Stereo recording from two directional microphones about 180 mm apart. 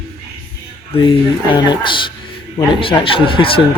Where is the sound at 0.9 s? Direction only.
30° left (ahead or behind).